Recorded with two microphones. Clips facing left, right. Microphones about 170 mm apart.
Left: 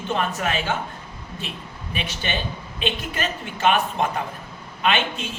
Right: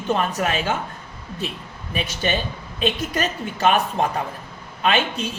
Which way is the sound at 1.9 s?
40° right (ahead or behind).